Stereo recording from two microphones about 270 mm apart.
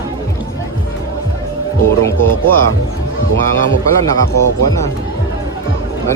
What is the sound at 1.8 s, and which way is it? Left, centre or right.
Speech, centre.